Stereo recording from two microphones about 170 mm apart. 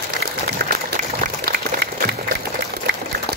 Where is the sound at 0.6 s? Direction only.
75° right (ahead or behind).